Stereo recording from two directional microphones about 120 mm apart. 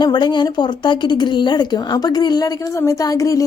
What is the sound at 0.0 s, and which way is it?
A woman's voice, 40° left (ahead or behind).